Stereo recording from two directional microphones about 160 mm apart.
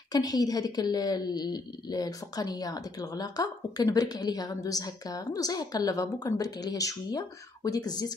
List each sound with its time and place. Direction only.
0.1 s a woman's voice: 25° left (ahead or behind)